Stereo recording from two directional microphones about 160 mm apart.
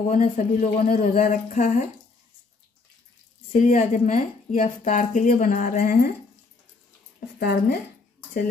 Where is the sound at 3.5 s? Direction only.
45° left (ahead or behind).